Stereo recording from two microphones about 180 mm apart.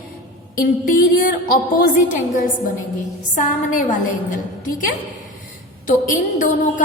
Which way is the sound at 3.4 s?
45° left (ahead or behind).